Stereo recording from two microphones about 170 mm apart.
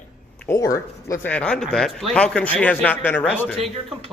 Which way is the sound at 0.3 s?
15° left (ahead or behind).